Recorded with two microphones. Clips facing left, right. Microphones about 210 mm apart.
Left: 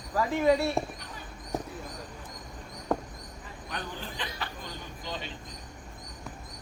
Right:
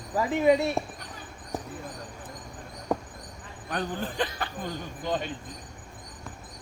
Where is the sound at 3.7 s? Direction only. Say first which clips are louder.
Right 8 dB; 50° right (ahead or behind).